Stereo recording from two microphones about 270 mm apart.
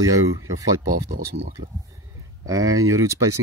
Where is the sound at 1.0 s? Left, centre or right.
Right.